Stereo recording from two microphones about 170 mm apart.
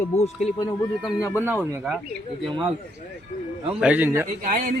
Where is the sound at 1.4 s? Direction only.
10° right (ahead or behind).